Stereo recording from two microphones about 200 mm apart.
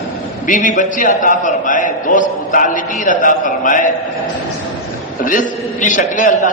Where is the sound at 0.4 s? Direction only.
40° left (ahead or behind).